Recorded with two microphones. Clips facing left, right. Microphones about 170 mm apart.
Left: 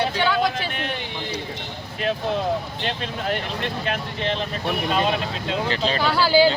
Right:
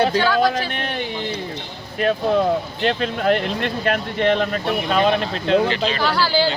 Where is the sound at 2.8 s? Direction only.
60° right (ahead or behind).